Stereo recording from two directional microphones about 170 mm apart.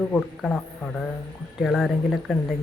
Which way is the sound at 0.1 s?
5° left (ahead or behind).